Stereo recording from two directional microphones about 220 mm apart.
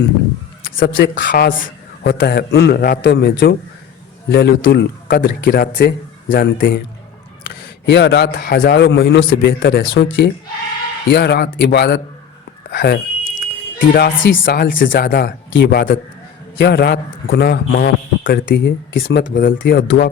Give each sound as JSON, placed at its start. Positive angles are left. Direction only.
{"t": 0.8, "sound": "speech", "side_deg": 55}
{"t": 1.1, "sound": "a man's voice", "side_deg": 40}
{"t": 14.4, "sound": "a man's voice", "side_deg": 45}